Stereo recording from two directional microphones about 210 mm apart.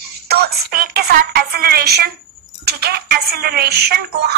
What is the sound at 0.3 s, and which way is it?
A woman's voice, 50° right (ahead or behind).